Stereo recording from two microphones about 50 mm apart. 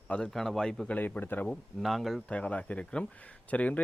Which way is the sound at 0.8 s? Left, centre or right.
Left.